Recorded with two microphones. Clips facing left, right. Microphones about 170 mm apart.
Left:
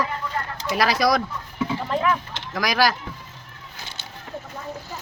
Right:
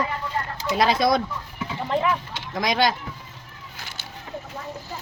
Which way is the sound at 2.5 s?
25° right (ahead or behind).